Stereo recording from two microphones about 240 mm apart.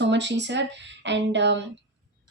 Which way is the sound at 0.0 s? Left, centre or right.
Right.